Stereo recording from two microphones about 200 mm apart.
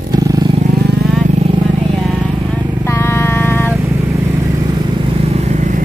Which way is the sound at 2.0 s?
Centre (ahead or behind).